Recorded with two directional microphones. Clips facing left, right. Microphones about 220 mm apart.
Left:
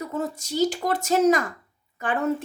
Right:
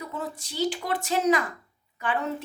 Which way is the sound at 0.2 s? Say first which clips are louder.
Left 5 dB; 45° left (ahead or behind).